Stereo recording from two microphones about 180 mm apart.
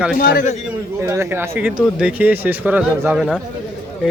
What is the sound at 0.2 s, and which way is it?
Speech, 50° left (ahead or behind).